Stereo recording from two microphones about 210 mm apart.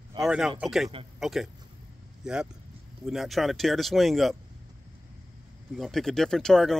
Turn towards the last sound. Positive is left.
turn(degrees=0)  # may be behind; listen again after turning